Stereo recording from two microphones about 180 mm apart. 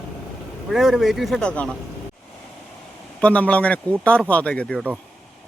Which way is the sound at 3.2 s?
5° left (ahead or behind).